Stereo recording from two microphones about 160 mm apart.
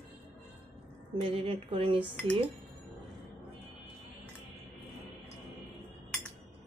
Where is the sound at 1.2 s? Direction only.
35° right (ahead or behind).